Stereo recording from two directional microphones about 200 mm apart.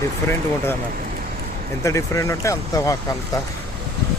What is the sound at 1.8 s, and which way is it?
Speech, 15° left (ahead or behind).